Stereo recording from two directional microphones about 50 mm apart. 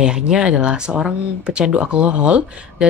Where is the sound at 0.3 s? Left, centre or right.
Centre.